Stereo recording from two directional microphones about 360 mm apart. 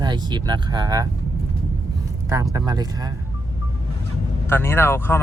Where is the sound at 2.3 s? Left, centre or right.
Centre.